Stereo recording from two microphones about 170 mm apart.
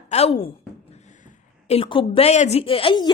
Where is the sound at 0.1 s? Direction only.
35° left (ahead or behind).